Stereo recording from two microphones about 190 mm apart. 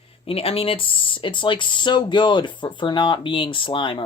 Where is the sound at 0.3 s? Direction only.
30° left (ahead or behind).